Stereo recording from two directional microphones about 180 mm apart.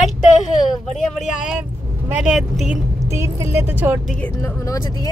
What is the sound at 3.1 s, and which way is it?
Speech, 15° right (ahead or behind).